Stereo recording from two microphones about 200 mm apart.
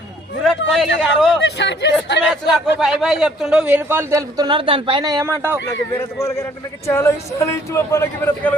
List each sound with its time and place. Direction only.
0.7 s a man's voice: centre (ahead or behind)
1.4 s speech: 60° left (ahead or behind)
2.2 s a man's voice: centre (ahead or behind)
6.0 s a man's voice: 15° left (ahead or behind)